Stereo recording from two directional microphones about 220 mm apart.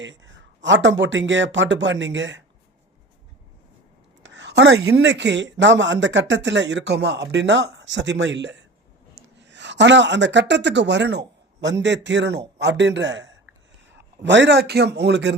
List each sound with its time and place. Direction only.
0.0 s a woman's voice: 55° right (ahead or behind)
4.2 s a woman's voice: 55° right (ahead or behind)